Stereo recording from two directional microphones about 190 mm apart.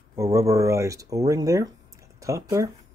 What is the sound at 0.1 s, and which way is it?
Speech, 15° right (ahead or behind).